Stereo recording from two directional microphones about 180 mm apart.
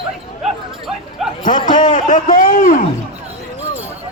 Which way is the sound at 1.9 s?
45° left (ahead or behind).